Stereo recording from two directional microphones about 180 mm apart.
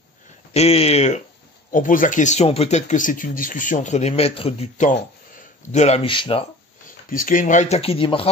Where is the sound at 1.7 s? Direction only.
50° left (ahead or behind); by 6.4 s 30° left (ahead or behind).